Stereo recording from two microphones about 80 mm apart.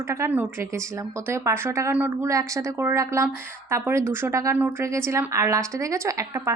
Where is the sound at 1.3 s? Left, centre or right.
Right.